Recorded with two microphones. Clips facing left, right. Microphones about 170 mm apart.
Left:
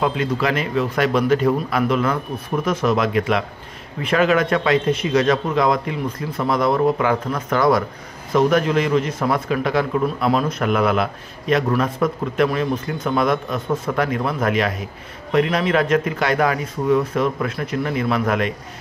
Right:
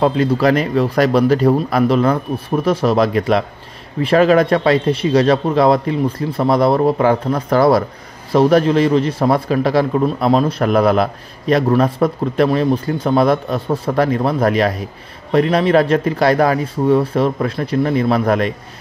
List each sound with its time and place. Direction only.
0.0 s a man's voice: 35° right (ahead or behind)